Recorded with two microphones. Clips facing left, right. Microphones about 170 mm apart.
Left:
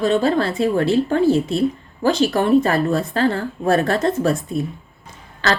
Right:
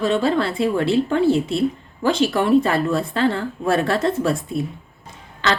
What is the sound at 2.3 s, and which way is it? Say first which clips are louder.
Speech: left 1 dB; 35° left (ahead or behind).